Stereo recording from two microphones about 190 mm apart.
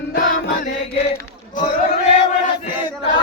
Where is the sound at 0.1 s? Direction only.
45° left (ahead or behind).